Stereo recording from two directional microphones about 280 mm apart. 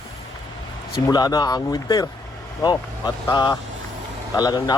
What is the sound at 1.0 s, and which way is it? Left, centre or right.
Speech, centre.